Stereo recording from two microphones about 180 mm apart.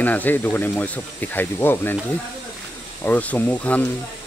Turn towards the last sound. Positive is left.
turn(degrees=10)  # may be behind; listen again after turning